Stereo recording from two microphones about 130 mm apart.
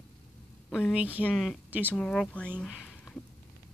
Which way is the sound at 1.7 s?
15° right (ahead or behind).